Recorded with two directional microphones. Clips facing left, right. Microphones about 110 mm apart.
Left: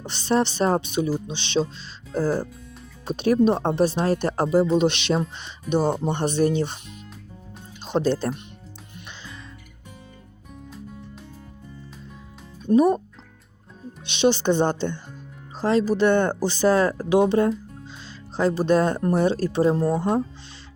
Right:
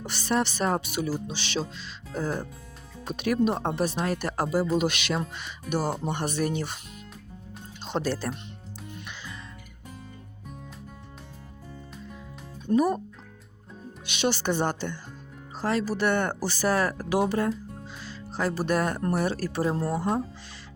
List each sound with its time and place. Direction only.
0.0 s speech: 25° left (ahead or behind)
7.9 s speech: 20° left (ahead or behind)
12.7 s speech: 25° left (ahead or behind)
14.0 s speech: 25° left (ahead or behind)